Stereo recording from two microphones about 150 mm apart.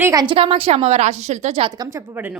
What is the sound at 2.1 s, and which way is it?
Speech, 10° right (ahead or behind).